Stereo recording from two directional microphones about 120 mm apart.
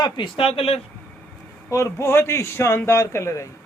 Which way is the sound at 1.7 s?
25° left (ahead or behind).